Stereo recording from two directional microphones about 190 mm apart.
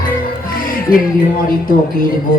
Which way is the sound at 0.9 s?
20° left (ahead or behind).